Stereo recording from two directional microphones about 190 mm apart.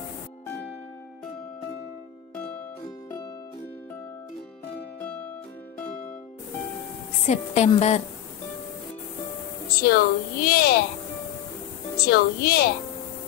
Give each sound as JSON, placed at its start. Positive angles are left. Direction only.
{"t": 2.3, "sound": "music", "side_deg": 10}
{"t": 7.2, "sound": "a woman's voice", "side_deg": 35}
{"t": 9.7, "sound": "a woman's voice", "side_deg": 50}
{"t": 12.0, "sound": "a woman's voice", "side_deg": 55}